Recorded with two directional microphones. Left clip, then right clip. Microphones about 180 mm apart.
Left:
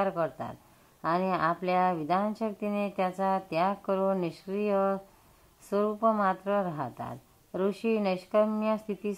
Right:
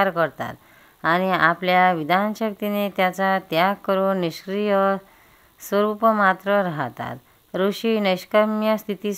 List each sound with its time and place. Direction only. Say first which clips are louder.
0.2 s speech: right 9 dB; 25° right (ahead or behind)